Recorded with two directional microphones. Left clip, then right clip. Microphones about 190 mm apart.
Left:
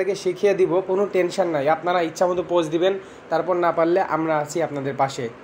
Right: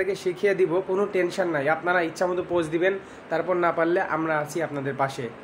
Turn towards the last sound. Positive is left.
turn(degrees=20)  # may be behind; listen again after turning